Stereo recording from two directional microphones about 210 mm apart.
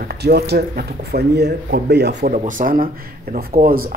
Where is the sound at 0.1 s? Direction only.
50° right (ahead or behind).